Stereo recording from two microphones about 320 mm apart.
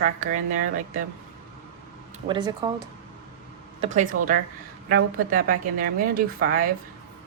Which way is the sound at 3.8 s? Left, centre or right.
Right.